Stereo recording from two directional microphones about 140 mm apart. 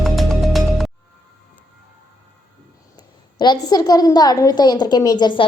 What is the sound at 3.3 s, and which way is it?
A woman's voice, 30° left (ahead or behind).